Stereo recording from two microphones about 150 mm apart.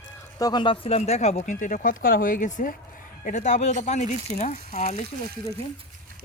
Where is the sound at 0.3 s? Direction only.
25° left (ahead or behind); by 4.8 s 45° left (ahead or behind).